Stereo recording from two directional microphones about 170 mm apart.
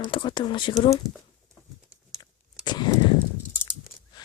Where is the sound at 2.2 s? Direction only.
25° left (ahead or behind).